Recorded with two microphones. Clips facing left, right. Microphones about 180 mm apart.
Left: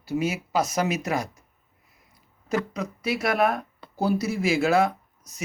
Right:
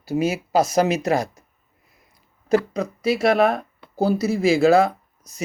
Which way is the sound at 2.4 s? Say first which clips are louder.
Right 7 dB; 30° right (ahead or behind).